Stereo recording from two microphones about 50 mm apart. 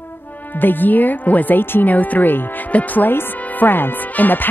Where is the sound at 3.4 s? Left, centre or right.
Left.